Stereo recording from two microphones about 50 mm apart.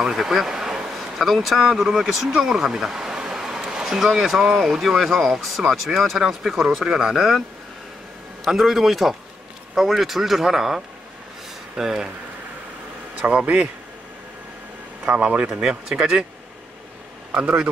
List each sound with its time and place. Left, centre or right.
0.0 s speech: centre
8.5 s speech: centre
13.2 s speech: right
15.0 s speech: right